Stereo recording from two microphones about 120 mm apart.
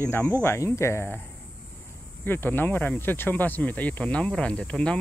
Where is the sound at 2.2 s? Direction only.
15° left (ahead or behind).